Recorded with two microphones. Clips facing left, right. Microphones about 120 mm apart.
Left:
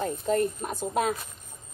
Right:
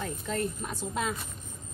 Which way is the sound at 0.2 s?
50° left (ahead or behind).